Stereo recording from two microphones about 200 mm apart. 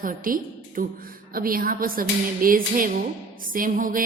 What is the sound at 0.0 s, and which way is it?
A woman's voice, 45° right (ahead or behind).